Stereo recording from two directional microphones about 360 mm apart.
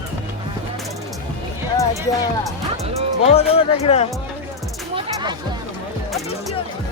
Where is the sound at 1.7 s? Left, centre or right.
Centre.